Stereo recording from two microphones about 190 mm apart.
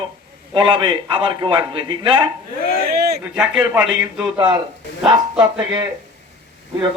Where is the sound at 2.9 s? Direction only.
55° right (ahead or behind).